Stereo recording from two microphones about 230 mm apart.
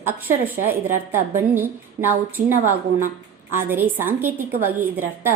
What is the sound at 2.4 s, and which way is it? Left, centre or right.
Speech, right.